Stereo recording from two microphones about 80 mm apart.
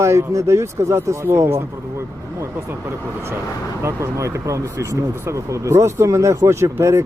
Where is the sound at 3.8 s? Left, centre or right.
Right.